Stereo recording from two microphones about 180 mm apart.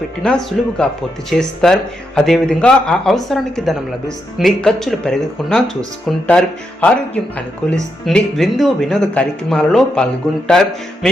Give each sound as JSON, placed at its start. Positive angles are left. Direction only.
{"t": 0.2, "sound": "speech", "side_deg": 5}